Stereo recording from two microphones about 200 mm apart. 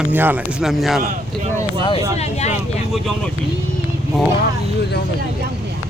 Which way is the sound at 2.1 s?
35° left (ahead or behind).